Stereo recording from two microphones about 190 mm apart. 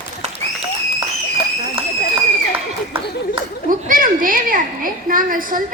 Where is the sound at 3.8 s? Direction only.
45° right (ahead or behind).